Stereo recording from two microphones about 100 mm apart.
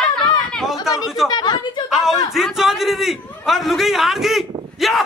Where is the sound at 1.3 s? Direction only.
45° left (ahead or behind).